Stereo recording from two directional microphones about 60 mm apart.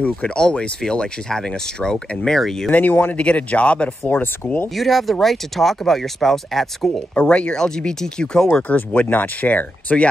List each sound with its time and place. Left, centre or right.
0.4 s speech: centre
2.7 s speech: left
3.2 s speech: centre
4.1 s speech: left
4.7 s speech: centre
7.2 s speech: centre
8.6 s speech: left